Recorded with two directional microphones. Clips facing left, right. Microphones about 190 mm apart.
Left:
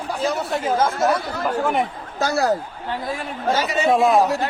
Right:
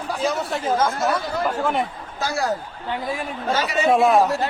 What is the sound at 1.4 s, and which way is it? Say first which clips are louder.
Speech: left 3 dB; 15° left (ahead or behind).